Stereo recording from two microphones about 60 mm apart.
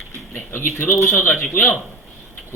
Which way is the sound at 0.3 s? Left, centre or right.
Left.